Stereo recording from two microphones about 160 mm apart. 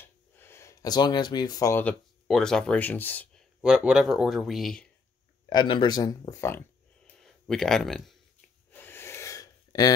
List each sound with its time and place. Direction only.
0.4 s speech: 15° left (ahead or behind)
2.2 s speech: 5° left (ahead or behind)
3.6 s speech: 5° right (ahead or behind)
5.5 s speech: 30° left (ahead or behind)
7.2 s speech: centre (ahead or behind)
8.7 s a sound: 15° left (ahead or behind)